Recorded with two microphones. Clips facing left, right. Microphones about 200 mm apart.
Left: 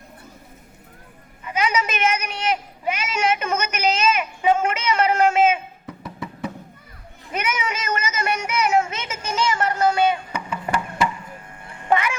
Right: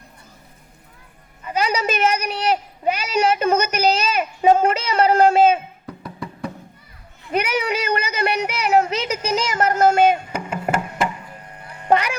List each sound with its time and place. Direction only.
1.5 s a woman's voice: 35° right (ahead or behind)
5.8 s music: centre (ahead or behind)
7.3 s a woman's voice: 35° right (ahead or behind)
7.7 s speech: 65° right (ahead or behind)
8.7 s speech: 35° right (ahead or behind)
11.7 s a sound: 40° right (ahead or behind)